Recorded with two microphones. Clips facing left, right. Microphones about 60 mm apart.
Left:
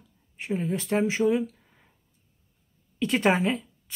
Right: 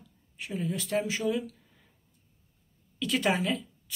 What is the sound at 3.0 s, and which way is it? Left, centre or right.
Speech, left.